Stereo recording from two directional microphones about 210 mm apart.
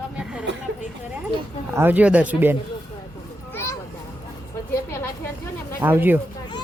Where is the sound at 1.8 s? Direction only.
10° right (ahead or behind).